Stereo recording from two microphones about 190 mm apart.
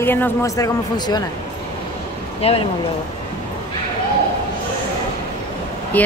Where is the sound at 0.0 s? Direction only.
10° left (ahead or behind).